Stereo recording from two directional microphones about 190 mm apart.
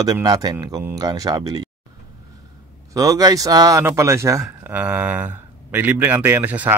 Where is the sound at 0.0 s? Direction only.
20° right (ahead or behind).